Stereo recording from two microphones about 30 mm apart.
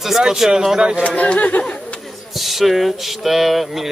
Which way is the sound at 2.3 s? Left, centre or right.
Centre.